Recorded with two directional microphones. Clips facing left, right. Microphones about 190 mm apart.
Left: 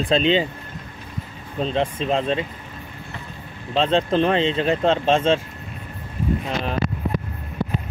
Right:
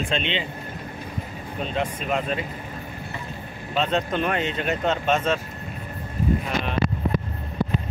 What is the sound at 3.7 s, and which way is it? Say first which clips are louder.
Speech: left 5 dB; 30° left (ahead or behind).